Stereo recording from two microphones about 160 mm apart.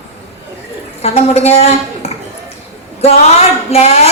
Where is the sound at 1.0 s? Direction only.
40° left (ahead or behind).